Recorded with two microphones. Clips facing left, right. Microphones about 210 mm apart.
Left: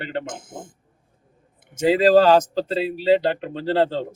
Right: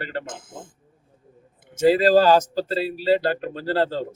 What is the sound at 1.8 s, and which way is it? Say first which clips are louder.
Speech: left 1 dB; 20° left (ahead or behind).